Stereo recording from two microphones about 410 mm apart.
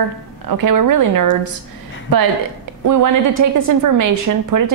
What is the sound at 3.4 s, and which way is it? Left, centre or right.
A woman's voice, right.